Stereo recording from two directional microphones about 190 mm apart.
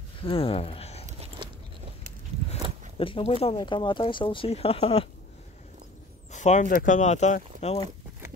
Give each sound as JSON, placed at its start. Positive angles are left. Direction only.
{"t": 0.2, "sound": "speech", "side_deg": 30}
{"t": 1.4, "sound": "biting", "side_deg": -25}
{"t": 3.0, "sound": "speech", "side_deg": 30}
{"t": 6.3, "sound": "speech", "side_deg": 40}